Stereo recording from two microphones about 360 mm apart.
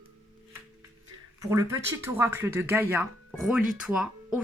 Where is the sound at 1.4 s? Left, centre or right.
Centre.